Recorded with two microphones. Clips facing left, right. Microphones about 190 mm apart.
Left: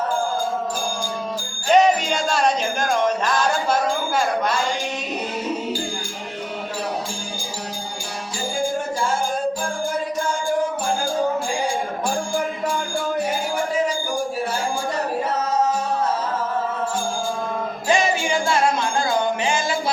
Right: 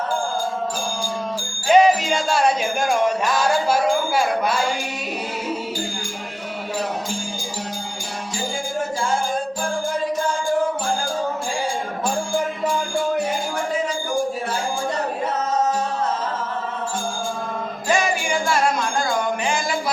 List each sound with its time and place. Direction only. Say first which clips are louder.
1.6 s music: right 1 dB; 5° right (ahead or behind)
17.8 s music: left 1 dB; 25° left (ahead or behind)